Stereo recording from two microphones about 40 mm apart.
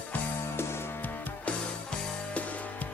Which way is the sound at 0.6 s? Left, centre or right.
Left.